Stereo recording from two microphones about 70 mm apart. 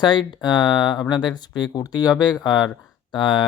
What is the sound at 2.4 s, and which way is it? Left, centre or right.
Speech, left.